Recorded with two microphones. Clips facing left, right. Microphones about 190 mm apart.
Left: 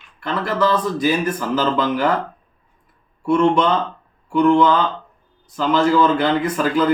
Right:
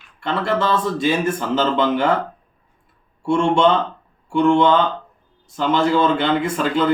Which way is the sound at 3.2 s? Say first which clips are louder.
Even; 25° right (ahead or behind).